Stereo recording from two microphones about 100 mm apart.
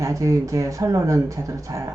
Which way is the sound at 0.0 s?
35° right (ahead or behind).